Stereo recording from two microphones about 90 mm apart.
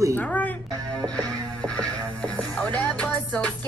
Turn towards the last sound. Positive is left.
turn(degrees=10)  # may be behind; listen again after turning